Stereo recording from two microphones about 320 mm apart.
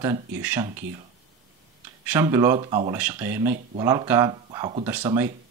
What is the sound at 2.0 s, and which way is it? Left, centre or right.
Speech, centre.